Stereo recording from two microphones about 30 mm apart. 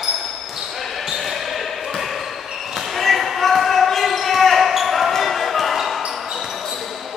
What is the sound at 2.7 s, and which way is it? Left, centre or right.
Basketball bounce, centre.